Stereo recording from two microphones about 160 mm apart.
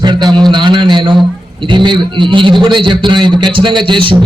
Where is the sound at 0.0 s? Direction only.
25° right (ahead or behind).